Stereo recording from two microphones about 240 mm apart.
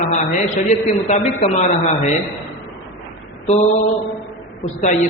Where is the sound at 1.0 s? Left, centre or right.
Left.